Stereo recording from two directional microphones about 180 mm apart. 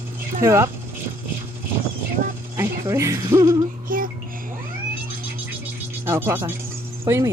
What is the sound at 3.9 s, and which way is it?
Music, 50° right (ahead or behind).